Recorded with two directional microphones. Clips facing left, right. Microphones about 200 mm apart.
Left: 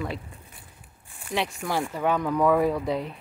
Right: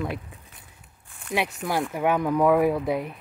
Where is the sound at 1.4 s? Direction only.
10° right (ahead or behind).